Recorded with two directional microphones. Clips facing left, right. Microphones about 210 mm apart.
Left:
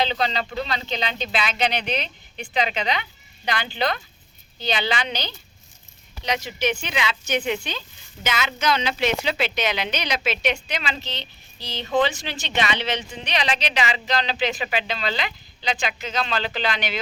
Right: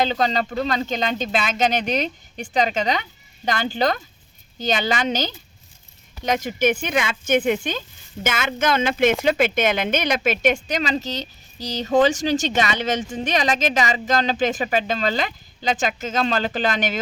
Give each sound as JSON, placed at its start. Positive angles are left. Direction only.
{"t": 0.0, "sound": "speech", "side_deg": -45}